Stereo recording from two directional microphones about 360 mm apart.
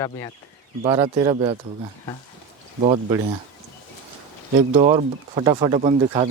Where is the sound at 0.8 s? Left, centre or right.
Centre.